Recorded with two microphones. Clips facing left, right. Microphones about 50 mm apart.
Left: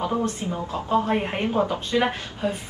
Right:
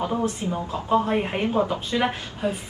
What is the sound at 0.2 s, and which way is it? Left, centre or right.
Speech, centre.